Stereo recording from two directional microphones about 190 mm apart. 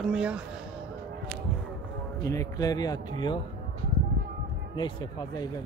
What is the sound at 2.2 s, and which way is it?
Speech, 15° left (ahead or behind).